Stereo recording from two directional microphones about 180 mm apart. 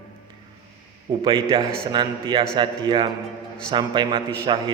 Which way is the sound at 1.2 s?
30° right (ahead or behind).